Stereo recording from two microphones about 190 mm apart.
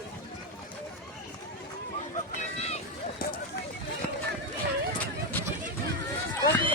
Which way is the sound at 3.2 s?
50° left (ahead or behind).